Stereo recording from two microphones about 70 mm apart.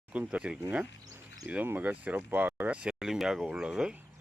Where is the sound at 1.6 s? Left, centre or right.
Right.